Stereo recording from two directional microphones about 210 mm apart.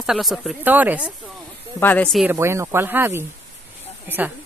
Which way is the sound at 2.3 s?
10° right (ahead or behind).